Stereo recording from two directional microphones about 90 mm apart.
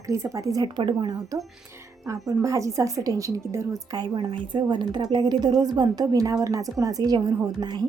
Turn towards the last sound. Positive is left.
turn(degrees=-50)  # may be behind; listen again after turning